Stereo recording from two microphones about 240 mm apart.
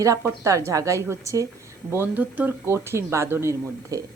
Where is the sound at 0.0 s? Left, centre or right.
Centre.